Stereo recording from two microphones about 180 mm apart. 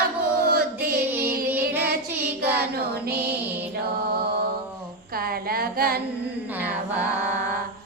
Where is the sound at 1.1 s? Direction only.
10° right (ahead or behind).